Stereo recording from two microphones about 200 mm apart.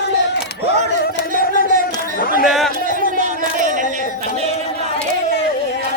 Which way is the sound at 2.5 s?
Centre (ahead or behind).